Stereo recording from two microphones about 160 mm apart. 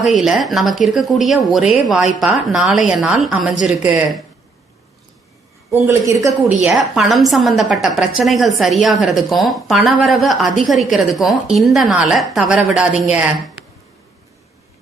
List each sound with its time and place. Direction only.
0.0 s a woman's voice: centre (ahead or behind)
5.9 s a woman's voice: 20° right (ahead or behind)
6.7 s a woman's voice: centre (ahead or behind)